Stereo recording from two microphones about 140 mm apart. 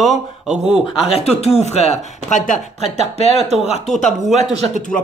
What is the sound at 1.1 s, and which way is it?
Speech, 50° left (ahead or behind).